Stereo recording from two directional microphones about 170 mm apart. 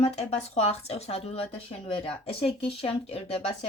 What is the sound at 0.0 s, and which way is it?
Speech, 40° left (ahead or behind).